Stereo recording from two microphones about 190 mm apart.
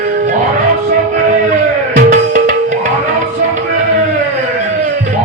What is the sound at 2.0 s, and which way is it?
Music, 45° right (ahead or behind).